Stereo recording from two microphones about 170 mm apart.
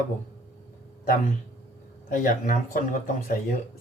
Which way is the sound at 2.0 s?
55° left (ahead or behind).